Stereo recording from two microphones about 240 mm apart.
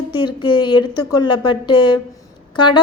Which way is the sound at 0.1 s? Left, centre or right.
Centre.